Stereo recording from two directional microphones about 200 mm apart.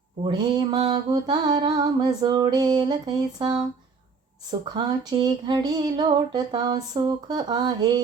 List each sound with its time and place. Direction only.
0.3 s mantra: 20° right (ahead or behind)